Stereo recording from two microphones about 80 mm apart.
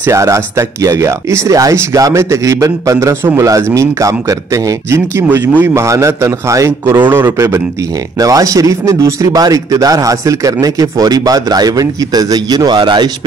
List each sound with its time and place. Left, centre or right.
0.1 s speech: right
5.8 s speech: right
7.0 s a man's voice: right
8.2 s speech: right